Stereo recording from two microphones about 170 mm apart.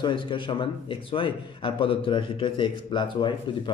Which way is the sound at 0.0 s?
30° left (ahead or behind).